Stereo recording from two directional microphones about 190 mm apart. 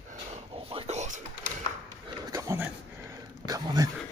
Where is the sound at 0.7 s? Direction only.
35° right (ahead or behind).